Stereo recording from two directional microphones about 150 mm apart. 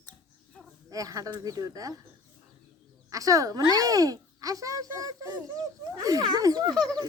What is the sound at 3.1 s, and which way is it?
Speech, 20° right (ahead or behind).